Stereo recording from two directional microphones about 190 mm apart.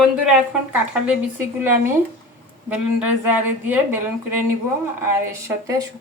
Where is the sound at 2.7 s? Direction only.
10° right (ahead or behind).